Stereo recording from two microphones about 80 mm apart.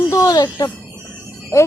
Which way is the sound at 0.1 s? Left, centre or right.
Left.